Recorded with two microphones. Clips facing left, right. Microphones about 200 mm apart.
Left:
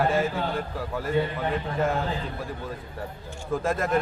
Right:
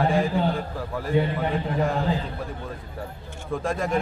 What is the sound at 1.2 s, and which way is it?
Speech, 20° right (ahead or behind).